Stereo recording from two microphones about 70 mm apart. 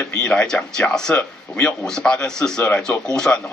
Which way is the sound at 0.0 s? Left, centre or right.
Centre.